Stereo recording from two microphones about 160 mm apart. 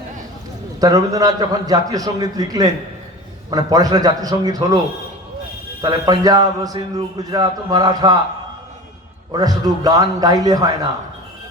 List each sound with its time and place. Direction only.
0.8 s a man's voice: 20° right (ahead or behind)
5.8 s a man's voice: 25° right (ahead or behind)
9.3 s a man's voice: 25° right (ahead or behind)